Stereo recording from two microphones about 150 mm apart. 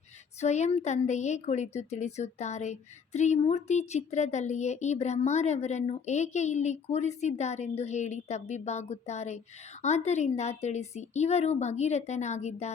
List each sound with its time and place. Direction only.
0.3 s a woman's voice: 50° left (ahead or behind)